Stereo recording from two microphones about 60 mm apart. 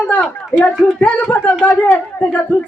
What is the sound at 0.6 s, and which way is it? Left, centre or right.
Speech, left.